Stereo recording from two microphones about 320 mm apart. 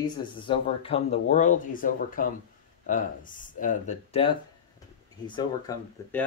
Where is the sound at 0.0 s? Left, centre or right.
Centre.